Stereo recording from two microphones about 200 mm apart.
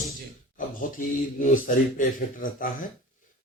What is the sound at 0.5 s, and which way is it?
A man's voice, 40° left (ahead or behind).